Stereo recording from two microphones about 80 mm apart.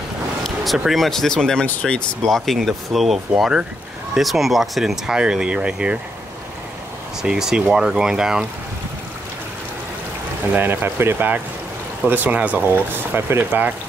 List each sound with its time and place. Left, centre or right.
0.7 s speech: centre
2.2 s speech: centre
7.2 s speech: centre
10.5 s speech: right